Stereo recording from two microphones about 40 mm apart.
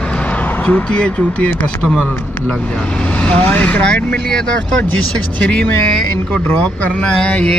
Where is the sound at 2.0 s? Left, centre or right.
Left.